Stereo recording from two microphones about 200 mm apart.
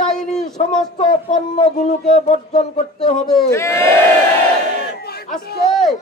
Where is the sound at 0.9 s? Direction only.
40° left (ahead or behind).